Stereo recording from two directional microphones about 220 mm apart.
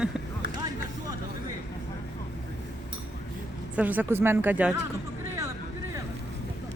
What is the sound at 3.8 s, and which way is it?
Speech, 10° right (ahead or behind).